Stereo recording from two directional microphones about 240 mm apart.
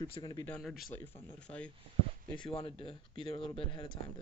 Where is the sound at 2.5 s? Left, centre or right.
Left.